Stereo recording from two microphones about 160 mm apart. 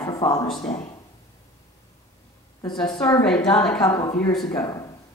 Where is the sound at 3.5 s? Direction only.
5° left (ahead or behind).